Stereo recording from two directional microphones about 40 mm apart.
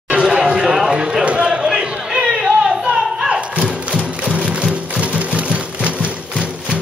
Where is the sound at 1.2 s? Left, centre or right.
Right.